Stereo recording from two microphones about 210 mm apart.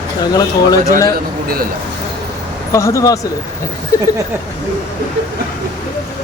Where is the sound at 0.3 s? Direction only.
15° left (ahead or behind).